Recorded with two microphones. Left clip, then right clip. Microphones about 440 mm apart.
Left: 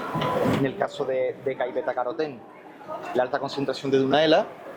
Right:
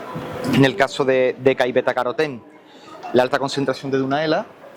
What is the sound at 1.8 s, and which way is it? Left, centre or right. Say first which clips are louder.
Speech: right 7 dB; right.